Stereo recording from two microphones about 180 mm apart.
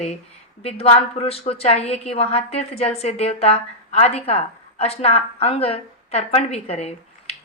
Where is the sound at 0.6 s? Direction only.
35° left (ahead or behind).